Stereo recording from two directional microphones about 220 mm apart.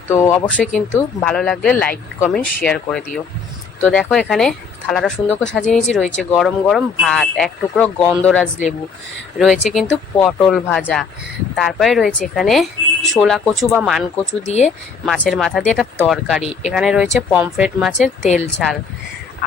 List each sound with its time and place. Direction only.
0.1 s speech: 10° left (ahead or behind)
14.4 s speech: 30° left (ahead or behind)
15.0 s speech: centre (ahead or behind)
18.2 s speech: 30° left (ahead or behind)